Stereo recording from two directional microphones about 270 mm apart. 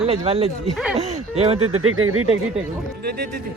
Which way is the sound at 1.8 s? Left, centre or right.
Right.